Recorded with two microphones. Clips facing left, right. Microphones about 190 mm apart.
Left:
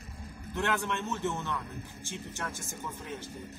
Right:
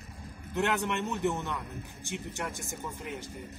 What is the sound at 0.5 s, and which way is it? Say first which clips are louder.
Speech: right 2 dB; 20° right (ahead or behind).